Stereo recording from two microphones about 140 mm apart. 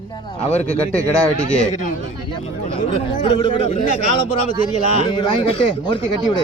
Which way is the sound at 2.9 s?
35° left (ahead or behind).